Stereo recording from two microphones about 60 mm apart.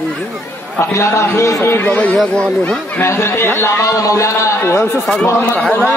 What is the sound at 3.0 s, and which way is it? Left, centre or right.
Speech, left.